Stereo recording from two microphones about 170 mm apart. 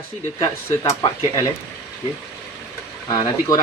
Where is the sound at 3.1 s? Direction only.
20° left (ahead or behind).